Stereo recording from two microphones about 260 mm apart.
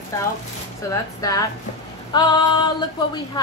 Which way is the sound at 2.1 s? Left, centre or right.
Centre.